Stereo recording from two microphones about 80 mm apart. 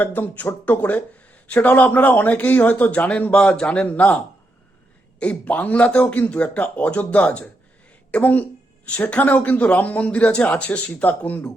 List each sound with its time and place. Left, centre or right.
0.0 s speech: left
5.2 s speech: centre